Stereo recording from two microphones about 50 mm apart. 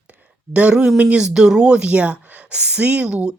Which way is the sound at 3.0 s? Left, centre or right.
Centre.